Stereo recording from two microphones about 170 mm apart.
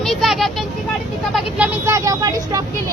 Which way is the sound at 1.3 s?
10° right (ahead or behind).